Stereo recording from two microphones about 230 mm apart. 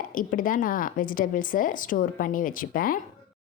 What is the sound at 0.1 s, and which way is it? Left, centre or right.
Speech, left.